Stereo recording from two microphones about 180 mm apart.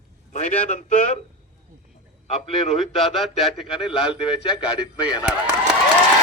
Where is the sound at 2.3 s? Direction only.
35° left (ahead or behind).